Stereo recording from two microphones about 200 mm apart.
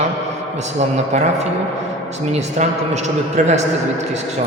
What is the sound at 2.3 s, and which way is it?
A man's voice, 35° right (ahead or behind).